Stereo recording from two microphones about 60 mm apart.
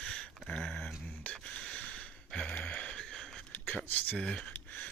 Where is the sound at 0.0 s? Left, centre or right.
Centre.